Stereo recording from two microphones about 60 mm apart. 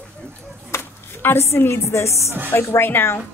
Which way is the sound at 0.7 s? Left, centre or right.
Left.